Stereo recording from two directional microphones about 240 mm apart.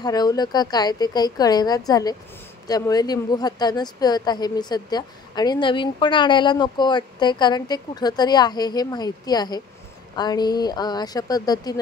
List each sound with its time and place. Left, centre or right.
0.0 s a woman's voice: centre